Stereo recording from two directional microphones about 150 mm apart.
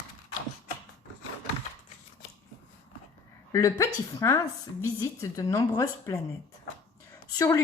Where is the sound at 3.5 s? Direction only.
20° left (ahead or behind).